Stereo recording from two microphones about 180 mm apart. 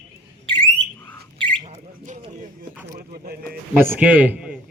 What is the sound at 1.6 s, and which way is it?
Bird, 40° right (ahead or behind).